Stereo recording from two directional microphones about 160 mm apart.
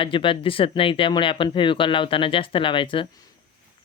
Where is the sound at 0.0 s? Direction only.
35° left (ahead or behind).